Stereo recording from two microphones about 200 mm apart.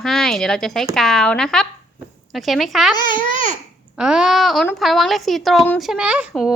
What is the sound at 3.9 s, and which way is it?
A woman's voice, 5° right (ahead or behind).